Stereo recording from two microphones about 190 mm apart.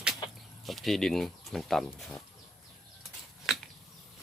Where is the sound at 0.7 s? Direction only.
Centre (ahead or behind).